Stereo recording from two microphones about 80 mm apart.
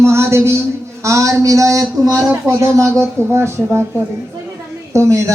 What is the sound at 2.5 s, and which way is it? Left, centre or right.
Speech, right.